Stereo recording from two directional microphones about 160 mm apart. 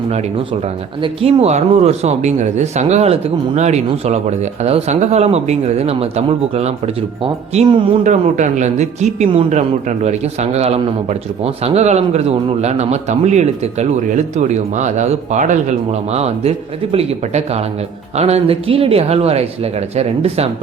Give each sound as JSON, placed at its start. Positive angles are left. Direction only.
{"t": 1.0, "sound": "speech", "side_deg": -40}
{"t": 8.0, "sound": "speech", "side_deg": -50}